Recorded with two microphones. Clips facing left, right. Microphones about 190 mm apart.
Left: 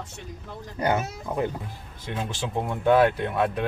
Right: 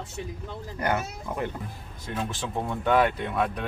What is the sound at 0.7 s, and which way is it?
Speech, 25° left (ahead or behind).